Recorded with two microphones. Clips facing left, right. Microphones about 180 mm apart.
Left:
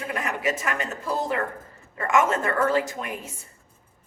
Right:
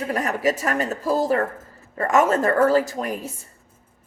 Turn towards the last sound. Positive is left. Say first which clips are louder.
# right 5 dB
turn(degrees=-35)  # may be behind; listen again after turning